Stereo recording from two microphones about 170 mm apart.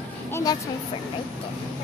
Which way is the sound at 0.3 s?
20° left (ahead or behind).